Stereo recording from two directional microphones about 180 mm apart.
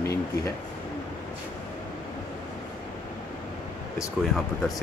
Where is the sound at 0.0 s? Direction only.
15° left (ahead or behind).